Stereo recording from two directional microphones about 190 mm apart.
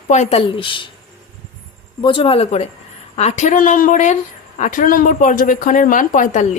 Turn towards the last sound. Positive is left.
turn(degrees=40)  # may be behind; listen again after turning